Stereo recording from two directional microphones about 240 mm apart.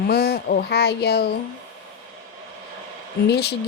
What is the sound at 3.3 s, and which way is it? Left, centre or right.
Speech, left.